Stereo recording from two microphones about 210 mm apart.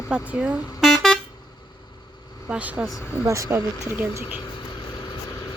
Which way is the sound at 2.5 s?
5° right (ahead or behind).